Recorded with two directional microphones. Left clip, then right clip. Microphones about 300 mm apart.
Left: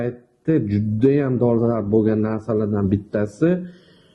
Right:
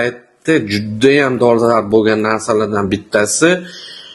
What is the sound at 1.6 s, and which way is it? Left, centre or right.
Speech, centre.